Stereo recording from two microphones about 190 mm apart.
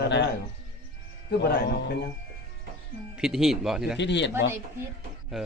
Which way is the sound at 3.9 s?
65° left (ahead or behind).